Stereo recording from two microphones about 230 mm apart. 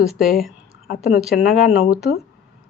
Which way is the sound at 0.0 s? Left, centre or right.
Centre.